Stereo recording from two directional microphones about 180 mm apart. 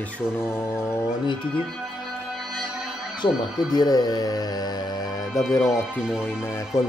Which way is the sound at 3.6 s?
20° left (ahead or behind).